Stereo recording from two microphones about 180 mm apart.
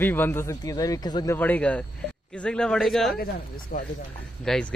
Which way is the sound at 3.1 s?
55° left (ahead or behind).